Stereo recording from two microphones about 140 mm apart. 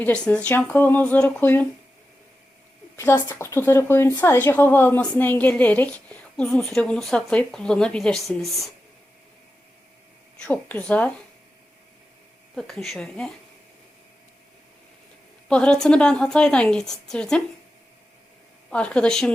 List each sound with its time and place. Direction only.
0.0 s speech: 10° left (ahead or behind)
2.9 s a woman's voice: 15° left (ahead or behind); by 8.7 s centre (ahead or behind)
10.3 s speech: 10° left (ahead or behind)
12.5 s a woman's voice: centre (ahead or behind)
15.4 s a woman's voice: 5° left (ahead or behind)
18.7 s speech: 5° left (ahead or behind)